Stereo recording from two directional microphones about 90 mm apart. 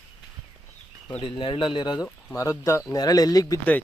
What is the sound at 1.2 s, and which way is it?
Speech, 85° left.